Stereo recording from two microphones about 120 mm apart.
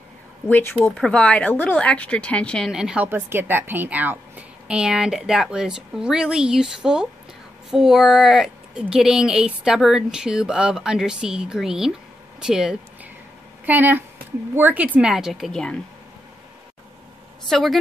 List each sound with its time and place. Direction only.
0.5 s a woman's voice: 15° left (ahead or behind)
0.9 s a woman's voice: 5° left (ahead or behind)
2.7 s a woman's voice: 5° right (ahead or behind)
3.1 s speech: 15° right (ahead or behind)
13.7 s a woman's voice: 15° right (ahead or behind); by 15.8 s 5° left (ahead or behind)
17.5 s speech: centre (ahead or behind)